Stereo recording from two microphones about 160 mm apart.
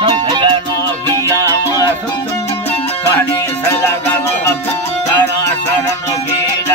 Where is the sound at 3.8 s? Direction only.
15° left (ahead or behind).